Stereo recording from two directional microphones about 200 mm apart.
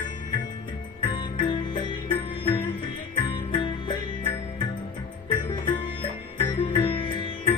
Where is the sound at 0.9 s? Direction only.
25° left (ahead or behind).